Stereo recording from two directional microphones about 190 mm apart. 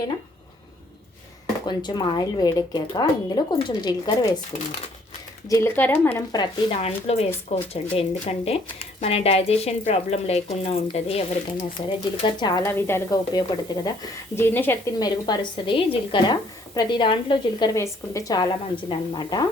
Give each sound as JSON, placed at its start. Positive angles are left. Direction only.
{"t": 1.6, "sound": "speech", "side_deg": 20}
{"t": 5.5, "sound": "speech", "side_deg": 15}
{"t": 6.3, "sound": "speech", "side_deg": 25}